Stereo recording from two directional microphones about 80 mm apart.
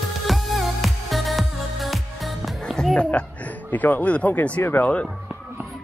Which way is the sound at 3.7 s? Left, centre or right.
Left.